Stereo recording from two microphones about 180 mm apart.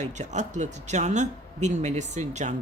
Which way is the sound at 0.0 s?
40° right (ahead or behind).